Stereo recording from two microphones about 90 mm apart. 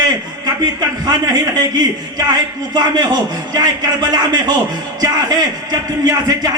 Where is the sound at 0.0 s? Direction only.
50° right (ahead or behind).